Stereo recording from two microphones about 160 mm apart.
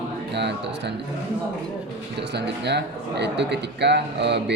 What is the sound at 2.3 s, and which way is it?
Speech, 90° right.